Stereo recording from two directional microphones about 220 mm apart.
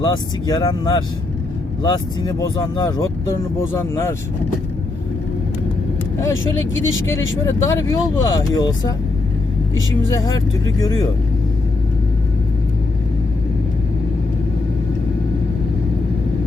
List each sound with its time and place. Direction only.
0.0 s speech: 15° left (ahead or behind)
6.1 s speech: 15° left (ahead or behind)
6.7 s speech: 60° left (ahead or behind)
7.0 s speech: 10° left (ahead or behind)